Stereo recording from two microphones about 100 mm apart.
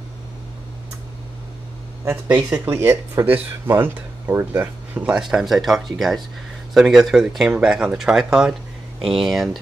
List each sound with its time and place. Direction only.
2.2 s speech: 15° right (ahead or behind)